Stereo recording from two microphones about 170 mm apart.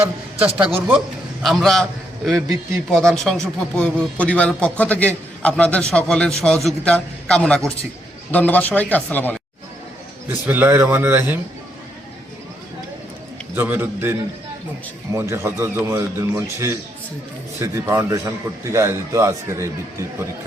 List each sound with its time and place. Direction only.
0.4 s a man's voice: 10° right (ahead or behind); by 9.4 s 10° left (ahead or behind)
10.2 s a man's voice: 10° right (ahead or behind)
13.6 s a man's voice: 10° right (ahead or behind)